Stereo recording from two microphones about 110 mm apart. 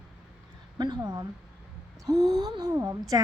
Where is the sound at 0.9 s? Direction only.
35° right (ahead or behind).